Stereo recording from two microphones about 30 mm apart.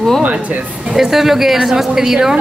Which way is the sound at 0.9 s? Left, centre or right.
Centre.